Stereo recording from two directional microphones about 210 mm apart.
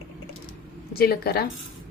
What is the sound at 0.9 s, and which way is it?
Speech, 50° left (ahead or behind).